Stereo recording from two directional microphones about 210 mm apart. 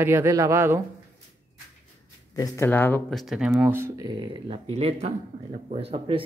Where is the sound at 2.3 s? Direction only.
15° left (ahead or behind).